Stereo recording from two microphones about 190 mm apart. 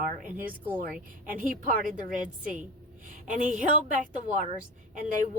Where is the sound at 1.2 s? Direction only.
45° right (ahead or behind).